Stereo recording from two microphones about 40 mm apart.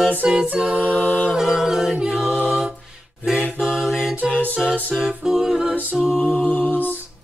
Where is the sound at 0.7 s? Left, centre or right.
Right.